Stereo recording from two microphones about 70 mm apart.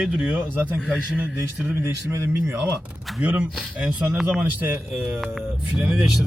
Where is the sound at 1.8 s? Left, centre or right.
Right.